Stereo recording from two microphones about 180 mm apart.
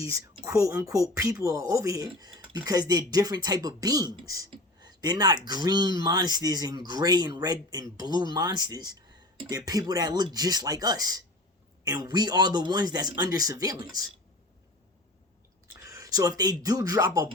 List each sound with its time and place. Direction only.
0.4 s speech: 15° right (ahead or behind)
15.6 s a sound: 15° right (ahead or behind)
16.4 s speech: 20° right (ahead or behind)